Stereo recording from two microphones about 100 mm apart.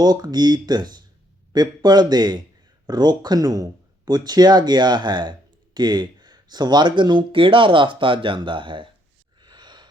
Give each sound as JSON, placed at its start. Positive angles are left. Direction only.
{"t": 0.0, "sound": "speech", "side_deg": -40}
{"t": 9.4, "sound": "gasp", "side_deg": -50}